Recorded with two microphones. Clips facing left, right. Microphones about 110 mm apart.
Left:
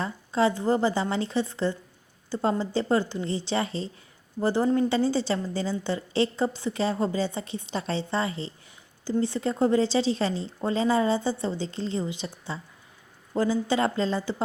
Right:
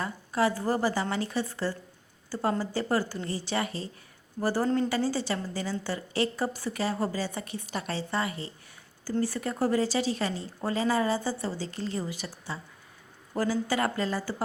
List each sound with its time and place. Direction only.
0.0 s a woman's voice: 25° left (ahead or behind)